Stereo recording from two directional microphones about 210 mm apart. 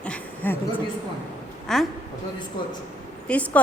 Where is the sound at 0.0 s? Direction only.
5° left (ahead or behind).